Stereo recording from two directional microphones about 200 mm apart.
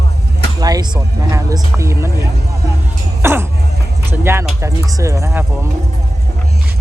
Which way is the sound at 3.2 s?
10° right (ahead or behind).